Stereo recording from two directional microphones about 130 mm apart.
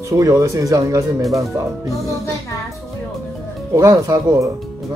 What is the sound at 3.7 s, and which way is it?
Speech, 25° right (ahead or behind).